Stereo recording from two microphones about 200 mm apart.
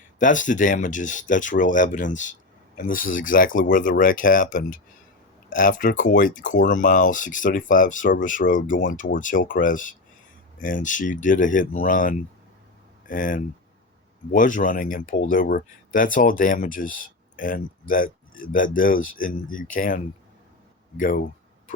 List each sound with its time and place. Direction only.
0.2 s speech: 40° left (ahead or behind)